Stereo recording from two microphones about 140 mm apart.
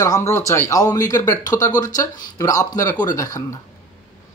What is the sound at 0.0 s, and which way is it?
Speech, 20° left (ahead or behind).